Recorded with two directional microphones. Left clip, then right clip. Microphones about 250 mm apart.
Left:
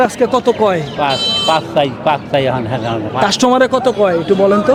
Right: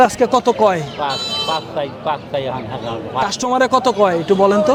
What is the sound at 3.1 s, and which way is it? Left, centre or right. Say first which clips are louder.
Speech: left 6 dB; left.